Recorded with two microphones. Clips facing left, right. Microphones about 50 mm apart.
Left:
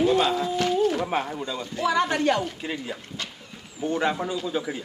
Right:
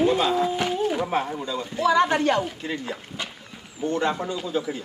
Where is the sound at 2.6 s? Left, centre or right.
Centre.